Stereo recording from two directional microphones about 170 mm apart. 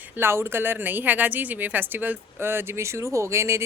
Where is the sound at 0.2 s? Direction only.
15° right (ahead or behind).